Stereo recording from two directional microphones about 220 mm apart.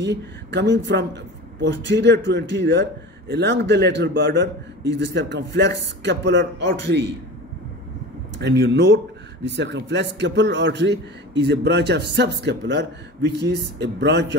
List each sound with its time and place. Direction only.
0.0 s speech: 55° right (ahead or behind)
8.4 s speech: 50° right (ahead or behind)